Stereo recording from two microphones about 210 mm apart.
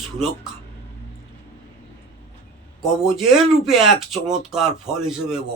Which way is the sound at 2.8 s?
Centre (ahead or behind).